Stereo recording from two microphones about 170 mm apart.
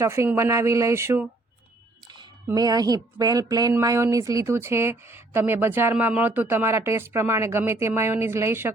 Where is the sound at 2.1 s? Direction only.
25° right (ahead or behind).